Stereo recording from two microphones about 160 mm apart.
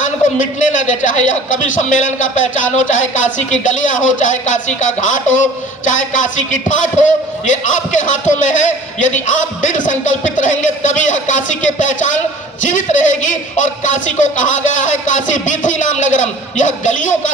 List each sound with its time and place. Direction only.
0.0 s a man's voice: 50° left (ahead or behind)